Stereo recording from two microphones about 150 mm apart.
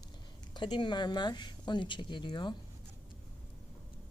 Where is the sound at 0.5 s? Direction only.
30° left (ahead or behind).